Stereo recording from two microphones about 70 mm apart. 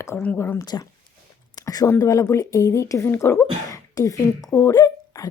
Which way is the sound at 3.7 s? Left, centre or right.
Left.